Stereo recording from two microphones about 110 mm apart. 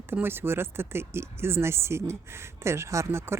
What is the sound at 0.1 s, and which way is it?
Speech, 20° right (ahead or behind).